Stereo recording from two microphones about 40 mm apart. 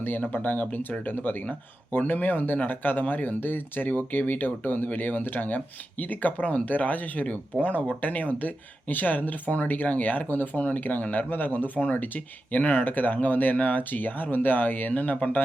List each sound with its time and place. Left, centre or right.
0.0 s speech: left